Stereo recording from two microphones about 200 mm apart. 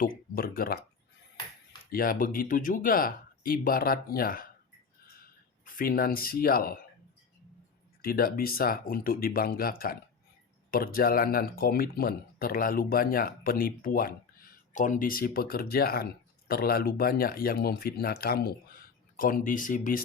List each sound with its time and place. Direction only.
0.3 s speech: 50° left (ahead or behind)
1.9 s speech: 45° left (ahead or behind)
5.6 s speech: 45° left (ahead or behind)
8.0 s speech: 45° left (ahead or behind)